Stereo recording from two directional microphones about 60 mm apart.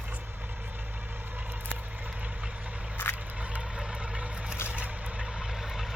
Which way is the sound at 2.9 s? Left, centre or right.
Left.